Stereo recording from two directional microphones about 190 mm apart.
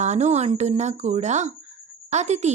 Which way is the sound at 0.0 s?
35° right (ahead or behind).